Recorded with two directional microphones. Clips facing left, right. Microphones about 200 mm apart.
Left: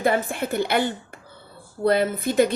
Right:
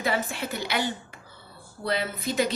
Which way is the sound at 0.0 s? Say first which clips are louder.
Left 6 dB; 50° left (ahead or behind).